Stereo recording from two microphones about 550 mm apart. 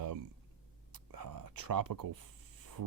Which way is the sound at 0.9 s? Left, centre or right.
Right.